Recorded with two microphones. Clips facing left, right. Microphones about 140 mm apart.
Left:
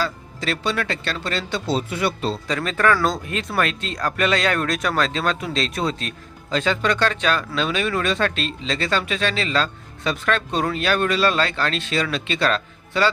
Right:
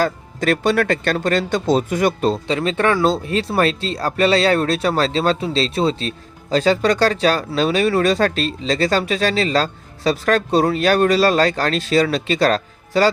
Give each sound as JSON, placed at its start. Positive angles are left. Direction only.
{"t": 0.0, "sound": "speech", "side_deg": -50}
{"t": 2.5, "sound": "speech", "side_deg": -30}